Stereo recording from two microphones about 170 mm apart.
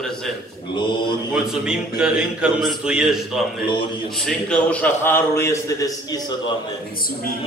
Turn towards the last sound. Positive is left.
turn(degrees=60)  # may be behind; listen again after turning